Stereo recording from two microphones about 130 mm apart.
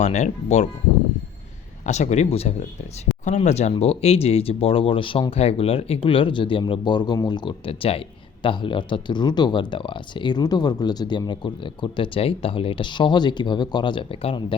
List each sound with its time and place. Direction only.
0.0 s speech: 60° left (ahead or behind)
1.8 s speech: 60° left (ahead or behind)